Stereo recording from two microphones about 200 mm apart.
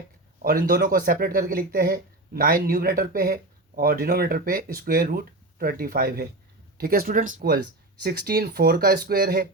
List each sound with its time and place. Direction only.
0.4 s speech: 45° right (ahead or behind)